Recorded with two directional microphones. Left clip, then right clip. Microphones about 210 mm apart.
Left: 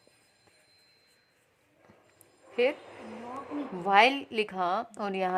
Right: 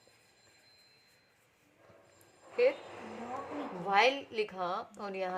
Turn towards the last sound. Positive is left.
turn(degrees=45)  # may be behind; listen again after turning